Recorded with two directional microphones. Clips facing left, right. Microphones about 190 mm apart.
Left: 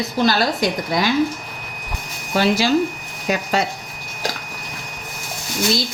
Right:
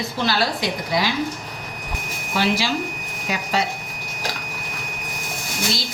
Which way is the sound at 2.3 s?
45° left (ahead or behind).